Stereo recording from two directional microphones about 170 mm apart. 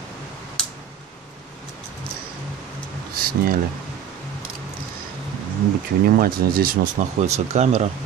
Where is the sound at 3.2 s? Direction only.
60° right (ahead or behind).